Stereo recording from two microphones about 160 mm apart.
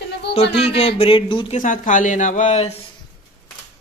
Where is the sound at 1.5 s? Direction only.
55° left (ahead or behind).